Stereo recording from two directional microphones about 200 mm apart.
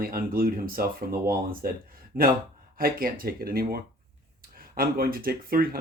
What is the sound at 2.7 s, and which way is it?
Speech, 45° right (ahead or behind).